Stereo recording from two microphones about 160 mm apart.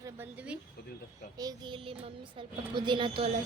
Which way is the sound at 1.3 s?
25° right (ahead or behind).